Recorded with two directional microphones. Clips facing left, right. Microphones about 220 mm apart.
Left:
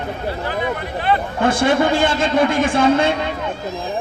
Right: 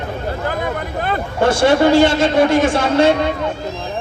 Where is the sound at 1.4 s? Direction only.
55° left (ahead or behind).